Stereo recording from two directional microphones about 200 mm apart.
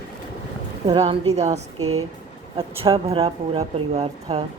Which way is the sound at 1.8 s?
90° right.